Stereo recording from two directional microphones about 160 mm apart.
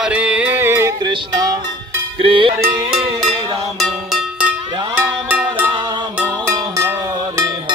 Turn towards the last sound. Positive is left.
turn(degrees=-20)  # may be behind; listen again after turning